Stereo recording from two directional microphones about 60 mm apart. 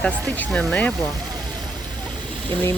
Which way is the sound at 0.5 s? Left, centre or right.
Left.